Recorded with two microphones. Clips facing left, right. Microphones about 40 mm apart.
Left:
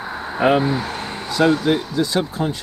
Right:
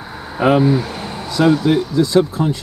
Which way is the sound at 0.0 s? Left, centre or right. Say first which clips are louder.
Right 1 dB; centre.